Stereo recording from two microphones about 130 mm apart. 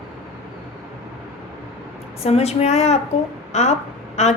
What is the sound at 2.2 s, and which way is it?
A woman's voice, 55° left (ahead or behind).